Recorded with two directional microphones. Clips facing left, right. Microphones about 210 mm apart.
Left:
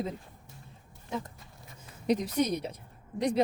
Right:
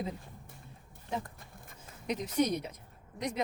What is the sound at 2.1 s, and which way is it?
Speech, 35° left (ahead or behind).